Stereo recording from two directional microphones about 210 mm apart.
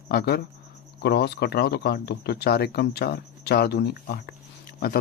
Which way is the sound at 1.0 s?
50° left (ahead or behind).